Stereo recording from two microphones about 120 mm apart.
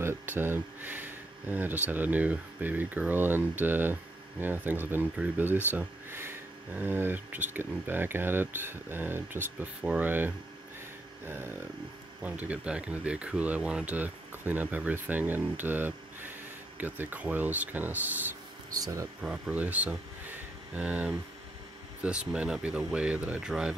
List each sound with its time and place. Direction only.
0.0 s speech: 20° right (ahead or behind)
18.7 s speech: 30° right (ahead or behind)
19.2 s speech: 10° right (ahead or behind)